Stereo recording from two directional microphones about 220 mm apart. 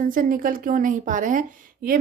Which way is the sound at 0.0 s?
40° right (ahead or behind).